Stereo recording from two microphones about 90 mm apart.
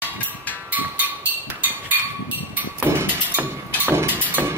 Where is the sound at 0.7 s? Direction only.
20° right (ahead or behind).